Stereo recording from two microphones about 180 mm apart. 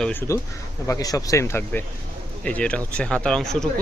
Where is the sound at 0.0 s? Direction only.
10° left (ahead or behind).